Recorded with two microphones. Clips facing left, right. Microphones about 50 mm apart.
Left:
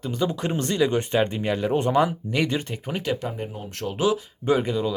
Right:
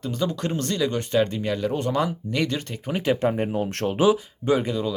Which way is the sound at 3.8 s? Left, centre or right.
Centre.